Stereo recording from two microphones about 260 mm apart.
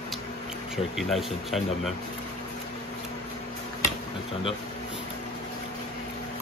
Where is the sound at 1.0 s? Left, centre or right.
Centre.